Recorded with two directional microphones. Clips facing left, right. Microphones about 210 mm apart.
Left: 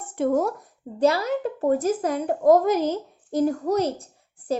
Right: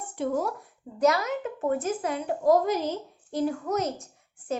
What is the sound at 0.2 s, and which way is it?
Speech, 45° left (ahead or behind).